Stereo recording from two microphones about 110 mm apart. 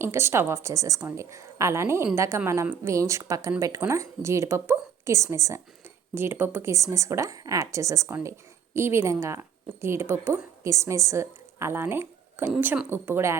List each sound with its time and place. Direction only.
0.0 s a woman's voice: 20° right (ahead or behind)